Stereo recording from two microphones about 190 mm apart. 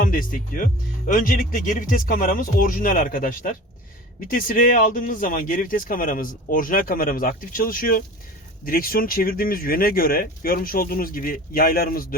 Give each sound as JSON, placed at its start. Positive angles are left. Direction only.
{"t": 0.0, "sound": "speech", "side_deg": 45}